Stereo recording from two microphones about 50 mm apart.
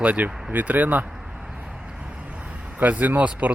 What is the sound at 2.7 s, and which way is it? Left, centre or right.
Speech, right.